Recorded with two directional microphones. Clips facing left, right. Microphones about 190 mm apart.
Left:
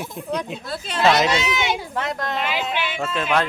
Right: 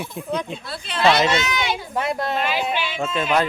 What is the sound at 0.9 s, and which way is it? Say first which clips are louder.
Speech: left 1 dB; 45° left (ahead or behind).